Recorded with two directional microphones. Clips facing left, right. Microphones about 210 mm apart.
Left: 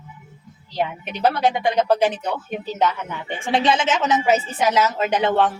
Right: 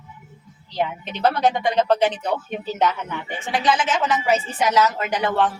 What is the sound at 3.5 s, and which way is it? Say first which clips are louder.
A woman's voice: left 2 dB; 25° left (ahead or behind).